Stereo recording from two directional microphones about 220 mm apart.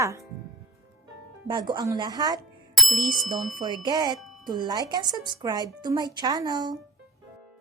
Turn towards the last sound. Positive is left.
turn(degrees=-20)  # may be behind; listen again after turning